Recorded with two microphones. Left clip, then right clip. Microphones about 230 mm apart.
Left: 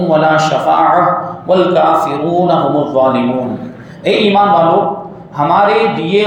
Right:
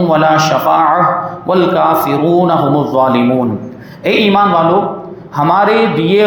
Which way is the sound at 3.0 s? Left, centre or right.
Right.